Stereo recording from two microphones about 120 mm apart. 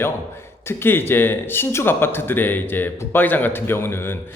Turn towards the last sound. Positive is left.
turn(degrees=20)  # may be behind; listen again after turning